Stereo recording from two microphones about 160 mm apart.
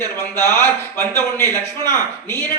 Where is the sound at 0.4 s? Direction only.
15° left (ahead or behind).